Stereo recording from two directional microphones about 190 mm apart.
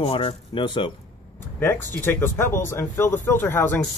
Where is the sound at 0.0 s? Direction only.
30° left (ahead or behind).